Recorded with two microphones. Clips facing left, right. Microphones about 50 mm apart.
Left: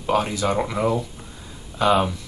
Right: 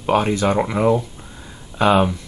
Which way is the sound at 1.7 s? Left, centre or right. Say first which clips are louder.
Right 3 dB; right.